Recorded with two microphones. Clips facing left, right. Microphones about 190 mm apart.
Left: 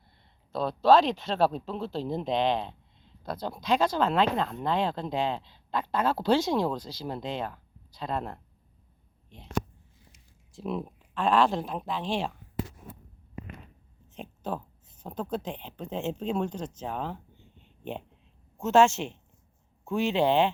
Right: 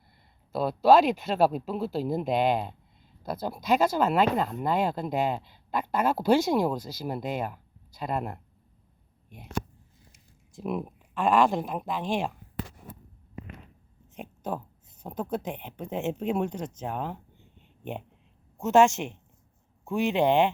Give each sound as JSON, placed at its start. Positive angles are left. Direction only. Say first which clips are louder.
{"t": 0.5, "sound": "speech", "louder": "right 1 dB", "side_deg": -10}
{"t": 10.5, "sound": "speech", "louder": "right 1 dB", "side_deg": -10}
{"t": 14.2, "sound": "a sound", "louder": "right 1 dB", "side_deg": -15}
{"t": 15.0, "sound": "speech", "louder": "right 1 dB", "side_deg": -15}
{"t": 17.6, "sound": "a sound", "louder": "even", "side_deg": -15}
{"t": 18.6, "sound": "speech", "louder": "right 1 dB", "side_deg": -15}